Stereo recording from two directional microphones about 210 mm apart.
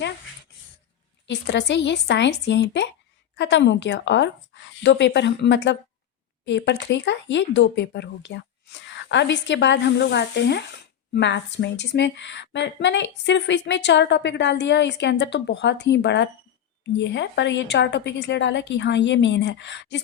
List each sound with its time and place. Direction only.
1.3 s a woman's voice: 55° left (ahead or behind)